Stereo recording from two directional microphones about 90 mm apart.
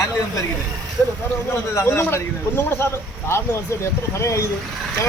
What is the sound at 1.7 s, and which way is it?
Speech, 30° left (ahead or behind).